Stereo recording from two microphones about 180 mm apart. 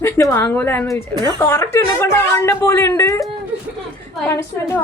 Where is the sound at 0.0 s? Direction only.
15° left (ahead or behind).